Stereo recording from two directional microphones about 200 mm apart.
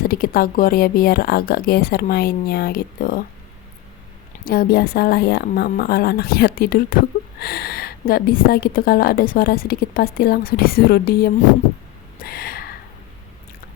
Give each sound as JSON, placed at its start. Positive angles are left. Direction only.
{"t": 0.0, "sound": "speech", "side_deg": 45}
{"t": 4.4, "sound": "speech", "side_deg": 50}
{"t": 12.2, "sound": "a sound", "side_deg": 50}